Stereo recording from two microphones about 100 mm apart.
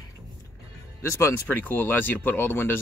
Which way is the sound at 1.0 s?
30° left (ahead or behind).